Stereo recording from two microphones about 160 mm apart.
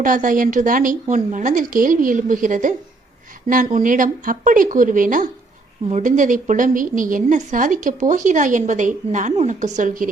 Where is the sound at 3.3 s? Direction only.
55° right (ahead or behind).